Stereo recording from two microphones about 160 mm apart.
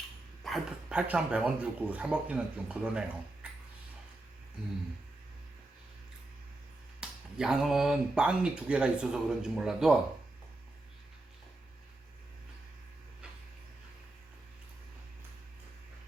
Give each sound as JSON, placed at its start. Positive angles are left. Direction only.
{"t": 0.4, "sound": "speech", "side_deg": -5}
{"t": 7.0, "sound": "speech", "side_deg": -5}